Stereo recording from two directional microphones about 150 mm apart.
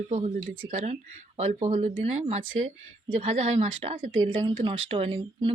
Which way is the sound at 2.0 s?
40° right (ahead or behind).